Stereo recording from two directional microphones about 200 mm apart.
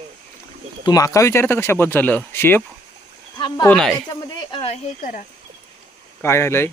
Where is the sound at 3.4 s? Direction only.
20° left (ahead or behind).